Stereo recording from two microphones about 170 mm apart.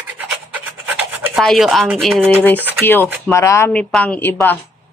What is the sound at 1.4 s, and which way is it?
Speech, centre (ahead or behind).